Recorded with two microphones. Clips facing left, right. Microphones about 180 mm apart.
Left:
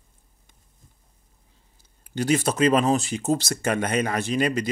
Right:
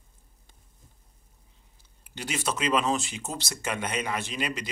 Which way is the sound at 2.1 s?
40° left (ahead or behind).